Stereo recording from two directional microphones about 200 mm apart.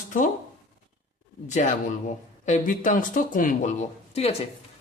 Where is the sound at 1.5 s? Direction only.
35° left (ahead or behind).